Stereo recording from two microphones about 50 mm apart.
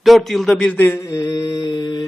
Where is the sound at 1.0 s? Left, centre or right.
Left.